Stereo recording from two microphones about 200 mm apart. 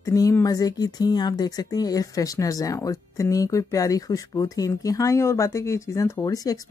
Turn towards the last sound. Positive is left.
turn(degrees=20)  # may be behind; listen again after turning